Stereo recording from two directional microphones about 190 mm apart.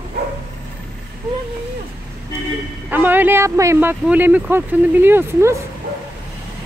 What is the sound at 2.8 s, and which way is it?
Speech, 10° right (ahead or behind).